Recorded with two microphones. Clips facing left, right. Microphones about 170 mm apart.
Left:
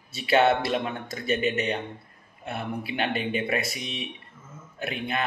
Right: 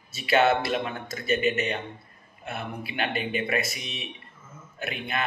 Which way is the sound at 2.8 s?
30° left (ahead or behind).